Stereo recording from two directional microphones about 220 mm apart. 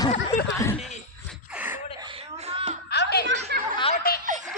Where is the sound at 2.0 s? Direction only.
25° right (ahead or behind).